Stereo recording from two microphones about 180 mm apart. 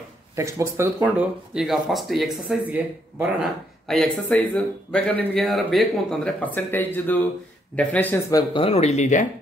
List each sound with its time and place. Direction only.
0.4 s speech: 15° right (ahead or behind); by 8.6 s 20° left (ahead or behind)
8.6 s speech: 35° left (ahead or behind)